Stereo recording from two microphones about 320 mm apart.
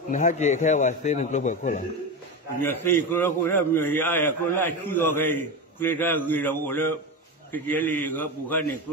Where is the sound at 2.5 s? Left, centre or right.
Centre.